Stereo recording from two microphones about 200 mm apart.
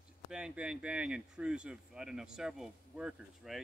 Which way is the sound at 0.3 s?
5° right (ahead or behind).